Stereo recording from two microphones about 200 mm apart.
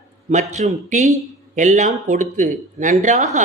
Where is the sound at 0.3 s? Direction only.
35° right (ahead or behind).